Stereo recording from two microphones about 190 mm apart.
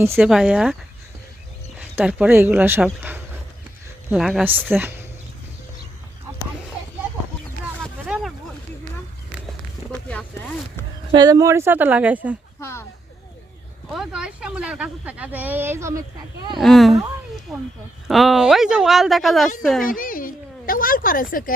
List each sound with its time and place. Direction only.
0.0 s speech: 15° right (ahead or behind)
2.0 s speech: 5° right (ahead or behind)
8.0 s a sound: centre (ahead or behind)
9.9 s a sound: 10° left (ahead or behind)
11.1 s speech: 20° right (ahead or behind)
12.5 s speech: 15° left (ahead or behind)
13.9 s speech: 5° right (ahead or behind)
16.6 s speech: centre (ahead or behind)
18.1 s speech: centre (ahead or behind)
19.8 s speech: 45° left (ahead or behind)